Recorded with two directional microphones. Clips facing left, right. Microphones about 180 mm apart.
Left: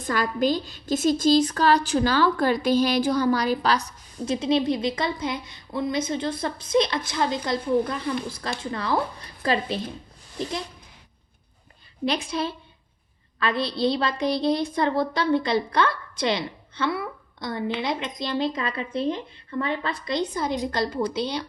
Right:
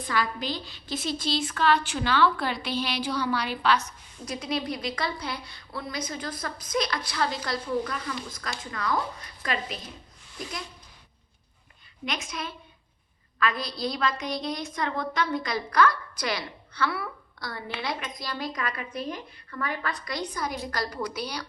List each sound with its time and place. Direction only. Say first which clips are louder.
0.0 s a woman's voice: left 6 dB; 45° left (ahead or behind); by 10.6 s 30° left (ahead or behind)
12.0 s a woman's voice: left 8 dB; 30° left (ahead or behind)